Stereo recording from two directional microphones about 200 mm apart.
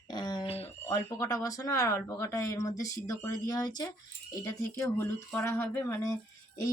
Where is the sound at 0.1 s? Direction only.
20° left (ahead or behind).